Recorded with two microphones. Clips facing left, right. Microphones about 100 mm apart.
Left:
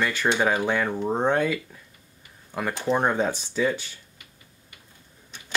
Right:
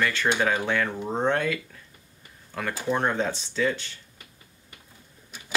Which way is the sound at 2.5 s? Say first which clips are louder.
Left 3 dB; 15° left (ahead or behind).